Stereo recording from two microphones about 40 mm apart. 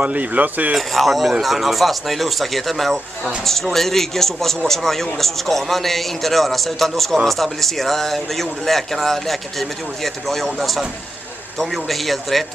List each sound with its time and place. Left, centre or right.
0.0 s speech: right
0.7 s a man's voice: centre